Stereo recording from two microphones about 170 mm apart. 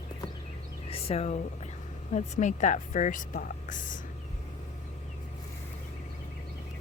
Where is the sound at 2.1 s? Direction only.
45° left (ahead or behind).